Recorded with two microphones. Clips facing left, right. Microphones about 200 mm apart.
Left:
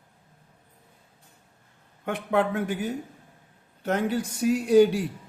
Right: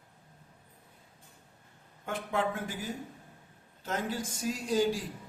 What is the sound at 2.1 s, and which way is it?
Speech, 65° left (ahead or behind).